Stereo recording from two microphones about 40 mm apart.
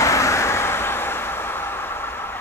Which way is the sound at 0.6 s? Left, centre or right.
Left.